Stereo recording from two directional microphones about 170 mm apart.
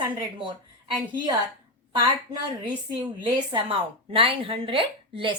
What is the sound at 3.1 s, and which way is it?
A woman's voice, 25° right (ahead or behind).